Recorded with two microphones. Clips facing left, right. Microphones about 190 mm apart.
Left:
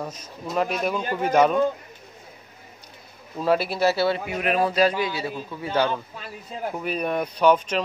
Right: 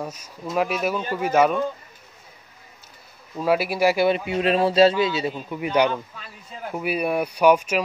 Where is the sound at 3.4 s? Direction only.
10° right (ahead or behind).